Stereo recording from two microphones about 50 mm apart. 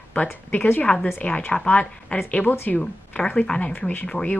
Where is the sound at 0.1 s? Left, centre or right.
Left.